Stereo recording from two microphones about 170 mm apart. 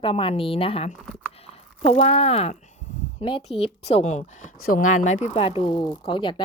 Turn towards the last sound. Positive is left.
turn(degrees=30)  # may be behind; listen again after turning